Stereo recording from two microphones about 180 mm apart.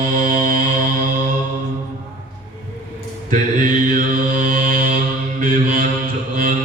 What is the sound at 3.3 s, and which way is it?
Mantra, 45° right (ahead or behind).